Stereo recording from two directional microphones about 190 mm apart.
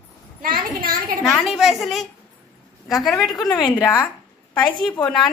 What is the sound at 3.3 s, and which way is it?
Speech, 20° left (ahead or behind).